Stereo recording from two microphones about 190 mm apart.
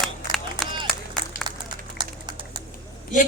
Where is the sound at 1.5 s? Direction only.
20° right (ahead or behind).